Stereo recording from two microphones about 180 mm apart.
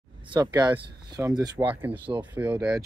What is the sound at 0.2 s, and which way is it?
Speech, 25° right (ahead or behind).